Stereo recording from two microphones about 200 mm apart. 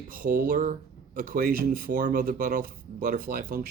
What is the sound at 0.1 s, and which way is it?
Speech, 45° right (ahead or behind).